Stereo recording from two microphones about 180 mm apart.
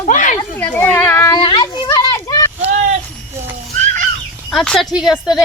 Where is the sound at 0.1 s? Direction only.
45° left (ahead or behind).